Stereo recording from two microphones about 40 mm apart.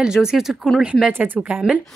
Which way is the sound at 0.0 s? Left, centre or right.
Centre.